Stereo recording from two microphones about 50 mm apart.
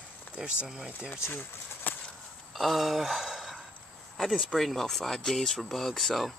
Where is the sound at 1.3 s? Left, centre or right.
Left.